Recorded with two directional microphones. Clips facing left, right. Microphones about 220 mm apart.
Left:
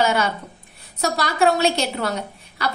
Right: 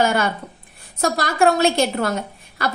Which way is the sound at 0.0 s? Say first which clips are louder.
Right 1 dB; 50° right (ahead or behind).